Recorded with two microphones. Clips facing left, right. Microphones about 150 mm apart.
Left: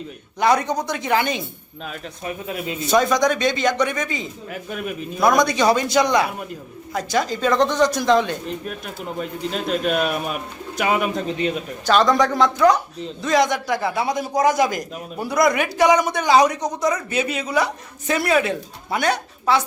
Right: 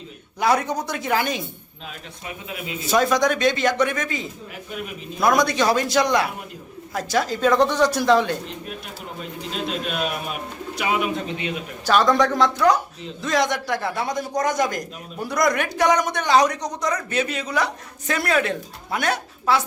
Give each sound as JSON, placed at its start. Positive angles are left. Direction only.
{"t": 0.3, "sound": "a man's voice", "side_deg": -5}
{"t": 1.9, "sound": "speech", "side_deg": 40}
{"t": 2.8, "sound": "a man's voice", "side_deg": -5}
{"t": 9.5, "sound": "a man's voice", "side_deg": 50}
{"t": 11.9, "sound": "a man's voice", "side_deg": 0}